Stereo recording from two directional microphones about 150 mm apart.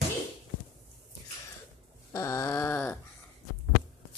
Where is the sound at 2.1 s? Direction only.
20° left (ahead or behind).